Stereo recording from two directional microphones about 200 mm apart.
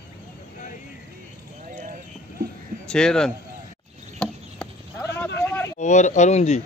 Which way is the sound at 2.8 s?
5° left (ahead or behind).